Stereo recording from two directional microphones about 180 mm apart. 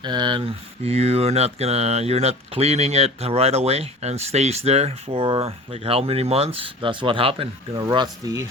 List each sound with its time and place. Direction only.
0.0 s speech: 25° right (ahead or behind)